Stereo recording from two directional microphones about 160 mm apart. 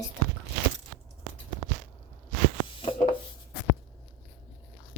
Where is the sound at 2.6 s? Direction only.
35° left (ahead or behind).